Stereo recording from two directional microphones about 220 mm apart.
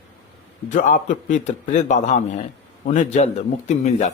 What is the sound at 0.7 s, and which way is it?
Speech, 35° left (ahead or behind).